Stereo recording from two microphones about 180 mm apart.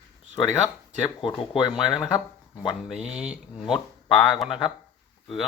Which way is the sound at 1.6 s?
Centre (ahead or behind).